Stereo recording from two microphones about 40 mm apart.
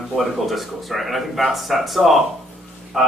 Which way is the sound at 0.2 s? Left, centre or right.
Centre.